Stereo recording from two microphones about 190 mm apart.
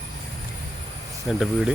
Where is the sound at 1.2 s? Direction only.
Centre (ahead or behind).